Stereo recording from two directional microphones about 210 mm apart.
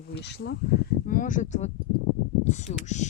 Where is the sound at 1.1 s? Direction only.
40° left (ahead or behind).